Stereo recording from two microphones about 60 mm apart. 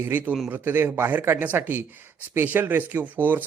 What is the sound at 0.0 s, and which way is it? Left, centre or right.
A man's voice, right.